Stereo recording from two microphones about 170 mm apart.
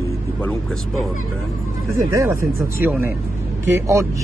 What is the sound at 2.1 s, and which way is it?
A man's voice, 15° right (ahead or behind).